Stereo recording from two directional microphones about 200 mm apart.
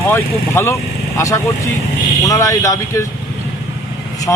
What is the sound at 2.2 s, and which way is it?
Speech, 15° left (ahead or behind).